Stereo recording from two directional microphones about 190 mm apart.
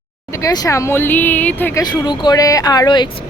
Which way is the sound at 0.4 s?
20° left (ahead or behind).